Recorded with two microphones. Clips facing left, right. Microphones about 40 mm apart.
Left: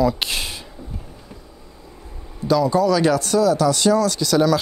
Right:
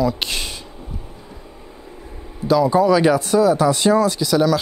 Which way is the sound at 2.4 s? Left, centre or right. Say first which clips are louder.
Right 2 dB; centre.